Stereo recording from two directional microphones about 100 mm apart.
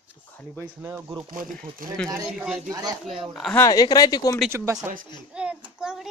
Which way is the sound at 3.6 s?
40° left (ahead or behind).